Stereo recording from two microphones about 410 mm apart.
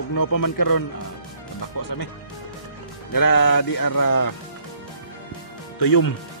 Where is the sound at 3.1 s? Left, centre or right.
Left.